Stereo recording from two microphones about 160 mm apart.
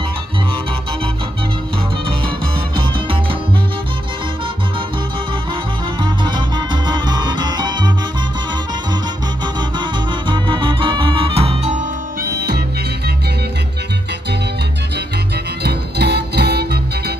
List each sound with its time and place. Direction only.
6.0 s music: 30° right (ahead or behind)
9.6 s music: 30° right (ahead or behind)
12.2 s music: 75° right (ahead or behind)
15.6 s music: 90° right